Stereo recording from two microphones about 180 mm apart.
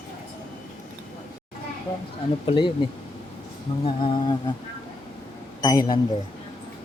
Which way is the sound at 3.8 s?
30° left (ahead or behind).